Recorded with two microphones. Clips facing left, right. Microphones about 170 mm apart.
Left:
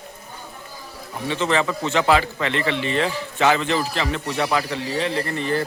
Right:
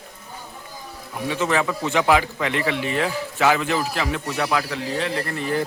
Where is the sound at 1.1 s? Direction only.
10° right (ahead or behind).